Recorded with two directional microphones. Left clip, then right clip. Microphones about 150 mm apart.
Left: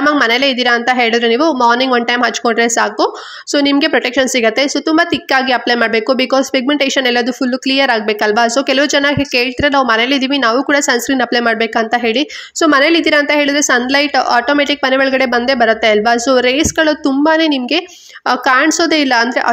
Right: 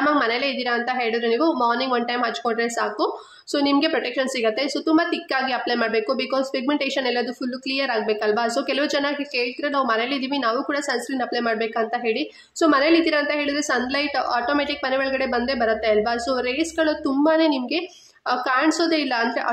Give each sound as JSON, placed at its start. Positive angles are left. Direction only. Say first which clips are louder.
{"t": 0.0, "sound": "a woman's voice", "louder": "left 9 dB", "side_deg": 45}